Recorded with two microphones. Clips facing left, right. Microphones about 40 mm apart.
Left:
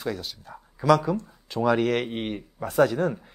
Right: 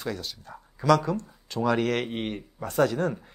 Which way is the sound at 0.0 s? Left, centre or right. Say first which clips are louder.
Left 2 dB; centre.